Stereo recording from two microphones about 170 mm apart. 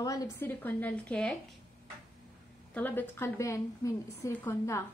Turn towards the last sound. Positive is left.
turn(degrees=15)  # may be behind; listen again after turning